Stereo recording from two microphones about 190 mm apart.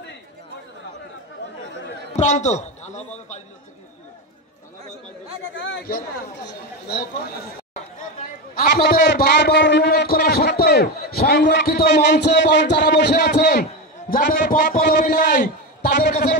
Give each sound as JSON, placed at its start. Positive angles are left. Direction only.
{"t": 2.1, "sound": "a sound", "side_deg": 40}
{"t": 5.6, "sound": "a man's voice", "side_deg": 55}
{"t": 8.5, "sound": "a man's voice", "side_deg": 50}
{"t": 13.1, "sound": "a man's voice", "side_deg": 50}